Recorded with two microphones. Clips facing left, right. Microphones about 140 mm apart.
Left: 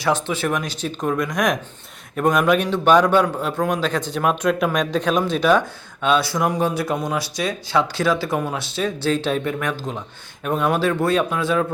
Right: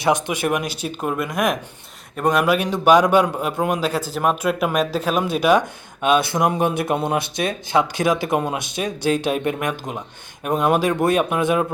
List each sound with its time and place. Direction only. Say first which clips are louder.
0.0 s a man's voice: right 1 dB; 15° right (ahead or behind)